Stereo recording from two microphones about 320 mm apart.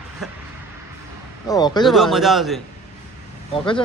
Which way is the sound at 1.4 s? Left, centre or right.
Centre.